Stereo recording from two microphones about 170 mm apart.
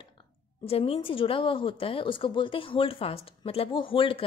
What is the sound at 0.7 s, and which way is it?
A woman's voice, 35° left (ahead or behind).